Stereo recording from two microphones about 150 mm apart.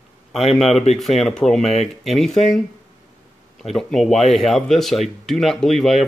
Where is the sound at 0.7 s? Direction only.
45° left (ahead or behind).